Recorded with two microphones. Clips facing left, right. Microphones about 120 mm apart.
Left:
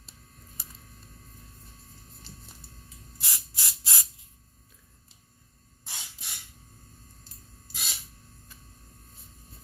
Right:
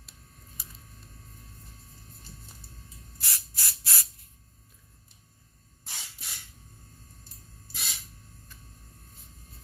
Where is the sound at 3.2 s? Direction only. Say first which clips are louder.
Even; 15° left (ahead or behind).